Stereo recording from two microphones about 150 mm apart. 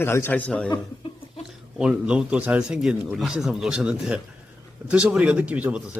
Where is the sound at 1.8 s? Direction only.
5° right (ahead or behind).